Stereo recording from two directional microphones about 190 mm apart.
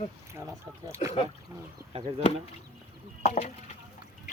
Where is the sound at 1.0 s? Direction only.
35° left (ahead or behind).